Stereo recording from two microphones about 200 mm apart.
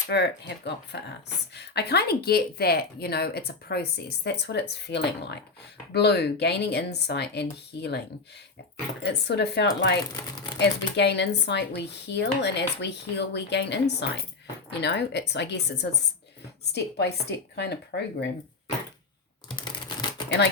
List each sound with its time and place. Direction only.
0.1 s speech: 60° left (ahead or behind)
9.0 s speech: 55° left (ahead or behind)
19.5 s a sound: 20° left (ahead or behind)